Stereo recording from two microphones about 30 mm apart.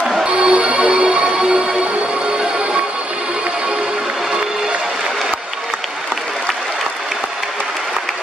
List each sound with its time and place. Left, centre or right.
0.2 s music: right